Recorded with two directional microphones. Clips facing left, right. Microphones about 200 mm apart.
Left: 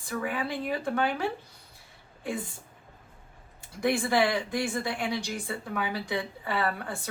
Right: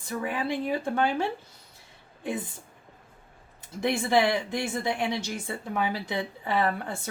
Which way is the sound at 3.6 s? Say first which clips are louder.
Even; 20° right (ahead or behind).